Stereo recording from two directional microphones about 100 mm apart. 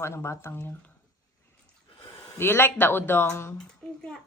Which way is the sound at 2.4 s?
25° left (ahead or behind).